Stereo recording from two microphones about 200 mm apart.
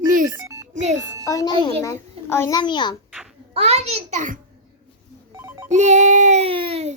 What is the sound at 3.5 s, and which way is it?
Speech, 30° right (ahead or behind).